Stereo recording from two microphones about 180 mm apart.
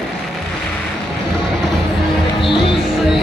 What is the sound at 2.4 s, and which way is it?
Music, 30° left (ahead or behind).